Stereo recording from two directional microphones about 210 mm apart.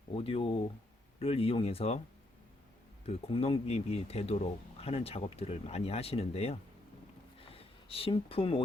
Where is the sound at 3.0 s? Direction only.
30° left (ahead or behind).